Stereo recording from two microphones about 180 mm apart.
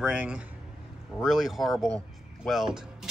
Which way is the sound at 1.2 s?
Centre (ahead or behind).